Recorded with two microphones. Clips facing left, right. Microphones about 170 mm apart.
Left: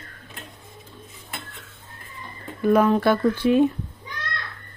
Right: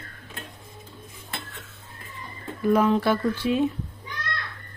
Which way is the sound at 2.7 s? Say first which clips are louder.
Left 3 dB; 55° left (ahead or behind).